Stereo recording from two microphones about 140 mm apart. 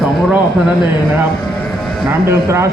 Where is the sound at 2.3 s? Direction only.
20° right (ahead or behind).